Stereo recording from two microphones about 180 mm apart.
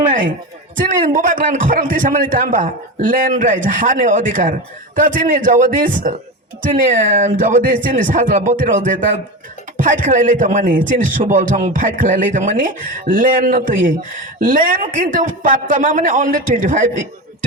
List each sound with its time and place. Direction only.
0.8 s a man's voice: 45° right (ahead or behind)